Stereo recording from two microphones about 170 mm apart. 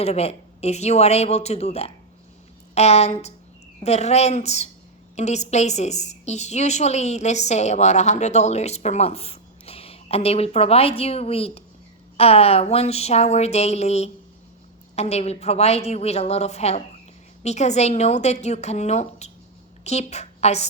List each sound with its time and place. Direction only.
0.0 s a woman's voice: 35° left (ahead or behind)